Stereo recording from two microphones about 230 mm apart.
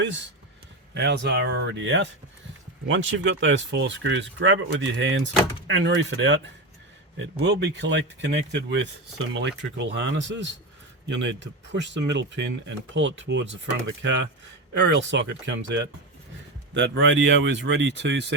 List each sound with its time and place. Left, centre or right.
0.9 s speech: right